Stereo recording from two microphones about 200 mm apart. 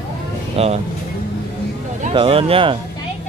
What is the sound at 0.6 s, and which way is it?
Speech, 30° right (ahead or behind).